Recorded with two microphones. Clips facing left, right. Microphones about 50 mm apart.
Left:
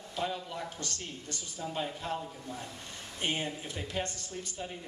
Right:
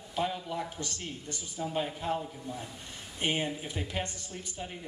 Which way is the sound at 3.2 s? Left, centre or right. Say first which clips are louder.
Right 3 dB; centre.